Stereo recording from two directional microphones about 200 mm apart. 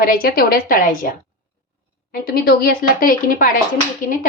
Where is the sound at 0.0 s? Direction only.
45° left (ahead or behind).